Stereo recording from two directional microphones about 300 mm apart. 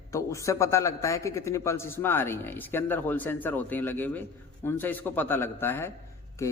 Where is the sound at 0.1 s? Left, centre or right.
Centre.